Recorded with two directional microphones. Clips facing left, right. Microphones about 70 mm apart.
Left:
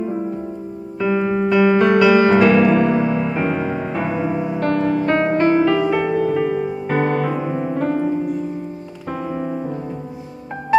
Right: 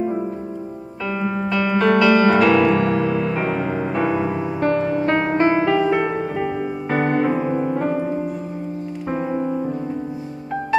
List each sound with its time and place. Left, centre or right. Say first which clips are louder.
1.0 s music: left 5 dB; centre
4.6 s music: even; centre
5.3 s music: left 2 dB; right
7.1 s piano: right 1 dB; centre